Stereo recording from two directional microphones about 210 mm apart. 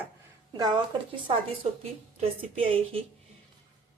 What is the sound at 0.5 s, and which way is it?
A woman's voice, 20° right (ahead or behind).